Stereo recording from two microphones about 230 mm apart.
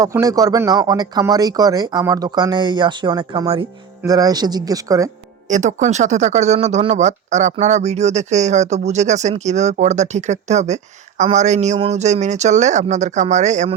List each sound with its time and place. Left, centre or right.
0.0 s speech: centre
5.5 s a man's voice: right